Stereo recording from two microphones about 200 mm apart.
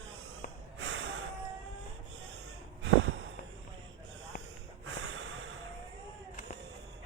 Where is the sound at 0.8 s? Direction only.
65° right (ahead or behind).